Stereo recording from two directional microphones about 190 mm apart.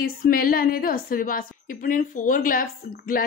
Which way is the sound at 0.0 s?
50° left (ahead or behind).